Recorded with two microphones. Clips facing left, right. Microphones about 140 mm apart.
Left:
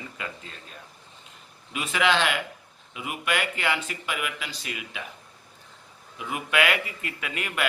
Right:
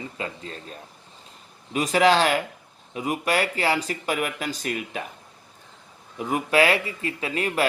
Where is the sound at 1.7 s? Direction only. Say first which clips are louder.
Right 6 dB; 40° right (ahead or behind).